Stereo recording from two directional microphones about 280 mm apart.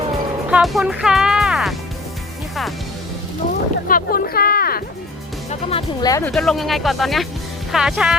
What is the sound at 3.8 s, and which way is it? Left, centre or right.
Speech, left.